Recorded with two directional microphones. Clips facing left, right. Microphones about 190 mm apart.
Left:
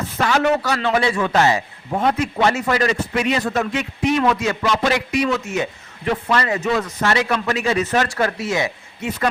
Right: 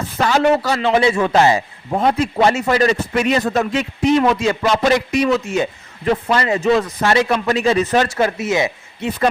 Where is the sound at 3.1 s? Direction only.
45° right (ahead or behind); by 4.7 s 30° right (ahead or behind).